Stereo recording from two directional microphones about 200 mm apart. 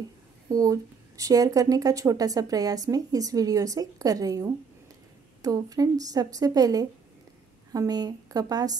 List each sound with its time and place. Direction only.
0.5 s a woman's voice: 15° right (ahead or behind)